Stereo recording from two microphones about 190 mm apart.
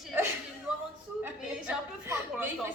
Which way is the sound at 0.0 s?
10° right (ahead or behind).